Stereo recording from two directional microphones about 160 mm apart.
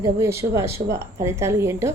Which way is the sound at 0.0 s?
15° right (ahead or behind).